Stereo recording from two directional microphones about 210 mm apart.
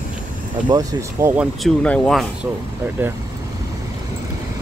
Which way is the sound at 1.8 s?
5° left (ahead or behind).